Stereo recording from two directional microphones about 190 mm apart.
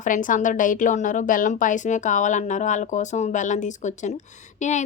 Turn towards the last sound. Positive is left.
turn(degrees=40)  # may be behind; listen again after turning